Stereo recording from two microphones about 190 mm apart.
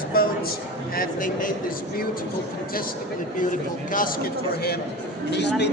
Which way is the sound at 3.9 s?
45° left (ahead or behind).